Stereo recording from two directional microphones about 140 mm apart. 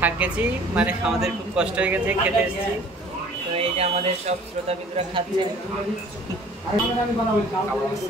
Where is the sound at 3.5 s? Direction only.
45° right (ahead or behind).